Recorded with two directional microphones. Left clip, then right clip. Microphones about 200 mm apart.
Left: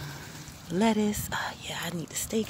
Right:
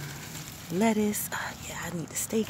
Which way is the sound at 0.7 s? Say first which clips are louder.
Even; 5° left (ahead or behind).